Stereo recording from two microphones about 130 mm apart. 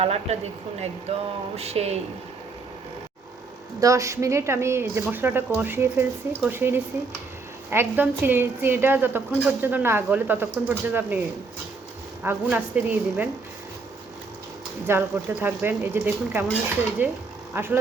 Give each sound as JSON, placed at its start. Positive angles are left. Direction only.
{"t": 0.0, "sound": "speech", "side_deg": -50}
{"t": 3.8, "sound": "a woman's voice", "side_deg": -25}
{"t": 12.2, "sound": "a woman's voice", "side_deg": -15}
{"t": 14.8, "sound": "a woman's voice", "side_deg": -15}